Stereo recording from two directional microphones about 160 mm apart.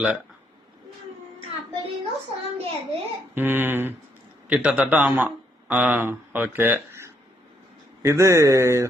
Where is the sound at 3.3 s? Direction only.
15° right (ahead or behind).